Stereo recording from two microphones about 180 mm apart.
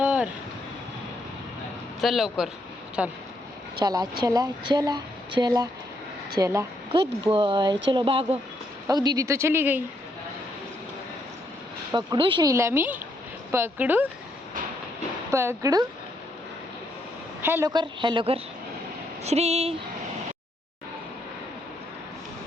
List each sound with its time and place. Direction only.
0.0 s a sound: 5° right (ahead or behind)
2.0 s speech: centre (ahead or behind)
3.8 s a woman's voice: 20° right (ahead or behind)
9.0 s speech: 20° right (ahead or behind)
11.9 s speech: 25° right (ahead or behind); by 14.1 s 10° right (ahead or behind)
15.3 s speech: 15° right (ahead or behind)
17.4 s a woman's voice: 15° right (ahead or behind); by 19.7 s 35° right (ahead or behind)